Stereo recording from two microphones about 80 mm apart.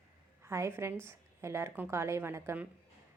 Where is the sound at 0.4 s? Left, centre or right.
Right.